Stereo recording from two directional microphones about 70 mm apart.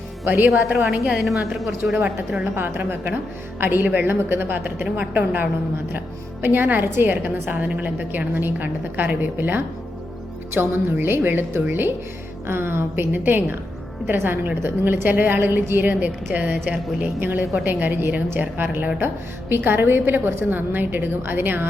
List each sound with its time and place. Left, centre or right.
0.3 s a woman's voice: right
1.8 s a woman's voice: right